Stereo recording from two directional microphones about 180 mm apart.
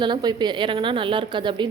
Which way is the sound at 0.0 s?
25° right (ahead or behind).